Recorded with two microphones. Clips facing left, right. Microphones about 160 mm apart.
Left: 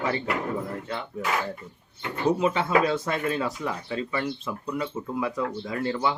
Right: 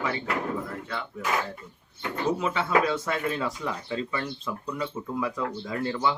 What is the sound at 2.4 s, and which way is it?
Speech, 15° left (ahead or behind).